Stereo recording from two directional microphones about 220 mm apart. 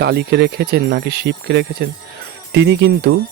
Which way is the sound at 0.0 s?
45° right (ahead or behind).